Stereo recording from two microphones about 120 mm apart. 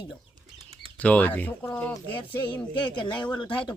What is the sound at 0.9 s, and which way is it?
Speech, 15° left (ahead or behind).